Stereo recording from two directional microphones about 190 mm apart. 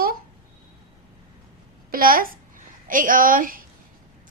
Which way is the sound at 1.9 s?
50° right (ahead or behind).